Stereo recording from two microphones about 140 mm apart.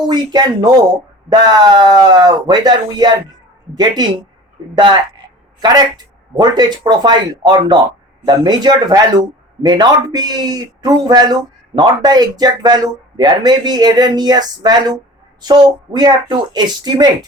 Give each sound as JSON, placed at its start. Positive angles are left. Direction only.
{"t": 0.0, "sound": "speech", "side_deg": -30}